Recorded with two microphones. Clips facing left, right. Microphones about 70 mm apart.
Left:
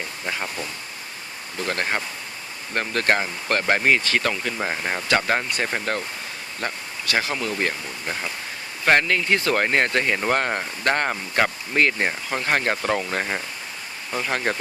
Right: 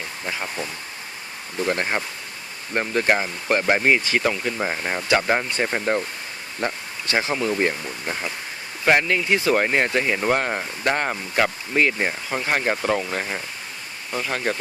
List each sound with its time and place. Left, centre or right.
0.3 s speech: centre
1.5 s speech: centre
5.9 s speech: right
7.7 s speech: centre